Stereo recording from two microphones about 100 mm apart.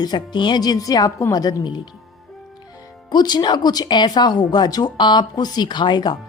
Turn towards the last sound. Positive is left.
turn(degrees=45)  # may be behind; listen again after turning